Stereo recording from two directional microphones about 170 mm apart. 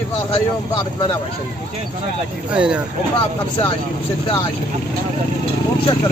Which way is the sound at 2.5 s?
5° right (ahead or behind).